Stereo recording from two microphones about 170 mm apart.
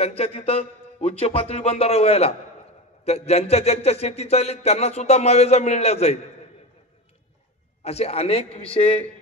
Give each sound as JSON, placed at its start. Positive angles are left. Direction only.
{"t": 0.0, "sound": "speech", "side_deg": 35}
{"t": 7.8, "sound": "speech", "side_deg": 40}